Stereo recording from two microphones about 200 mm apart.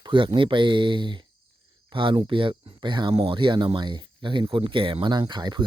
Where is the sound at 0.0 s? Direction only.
25° right (ahead or behind).